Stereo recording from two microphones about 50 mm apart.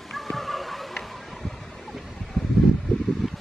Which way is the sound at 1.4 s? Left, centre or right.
Centre.